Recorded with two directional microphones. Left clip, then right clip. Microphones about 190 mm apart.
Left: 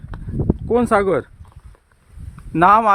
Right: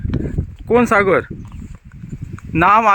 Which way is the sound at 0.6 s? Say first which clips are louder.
Right 4 dB; 5° right (ahead or behind).